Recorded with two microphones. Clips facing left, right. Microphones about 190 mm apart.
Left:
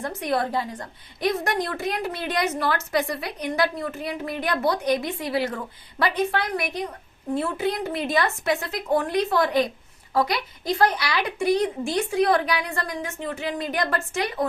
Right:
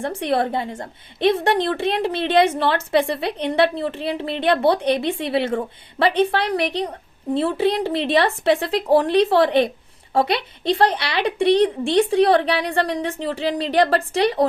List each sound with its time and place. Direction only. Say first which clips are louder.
0.0 s a woman's voice: right 4 dB; 30° right (ahead or behind)